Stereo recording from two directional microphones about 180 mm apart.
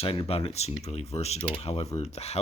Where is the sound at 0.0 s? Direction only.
30° left (ahead or behind).